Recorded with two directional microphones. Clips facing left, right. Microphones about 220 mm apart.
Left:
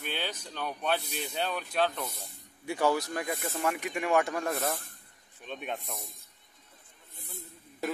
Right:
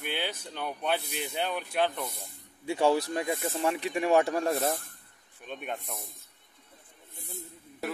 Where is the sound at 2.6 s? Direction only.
25° right (ahead or behind).